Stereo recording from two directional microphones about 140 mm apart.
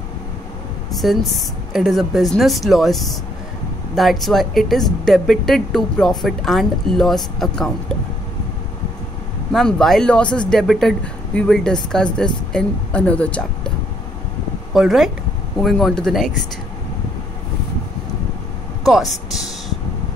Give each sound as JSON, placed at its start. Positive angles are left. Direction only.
{"t": 1.7, "sound": "speech", "side_deg": 0}
{"t": 9.5, "sound": "speech", "side_deg": 0}
{"t": 14.7, "sound": "speech", "side_deg": 0}
{"t": 18.9, "sound": "speech", "side_deg": 0}